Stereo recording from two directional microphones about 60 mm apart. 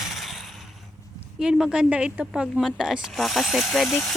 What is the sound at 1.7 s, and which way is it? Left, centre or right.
Speech, centre.